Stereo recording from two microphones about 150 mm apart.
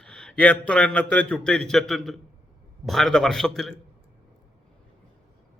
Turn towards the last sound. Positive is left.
turn(degrees=5)  # may be behind; listen again after turning